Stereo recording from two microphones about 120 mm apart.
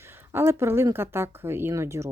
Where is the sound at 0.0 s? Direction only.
20° right (ahead or behind).